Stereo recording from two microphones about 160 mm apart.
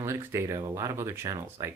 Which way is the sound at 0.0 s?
15° right (ahead or behind).